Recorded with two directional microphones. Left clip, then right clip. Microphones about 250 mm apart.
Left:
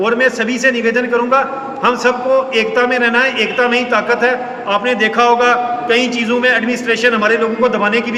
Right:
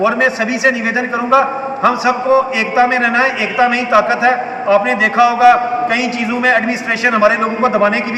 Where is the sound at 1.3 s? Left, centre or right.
Centre.